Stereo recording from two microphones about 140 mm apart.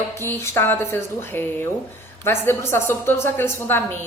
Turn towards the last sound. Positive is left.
turn(degrees=15)  # may be behind; listen again after turning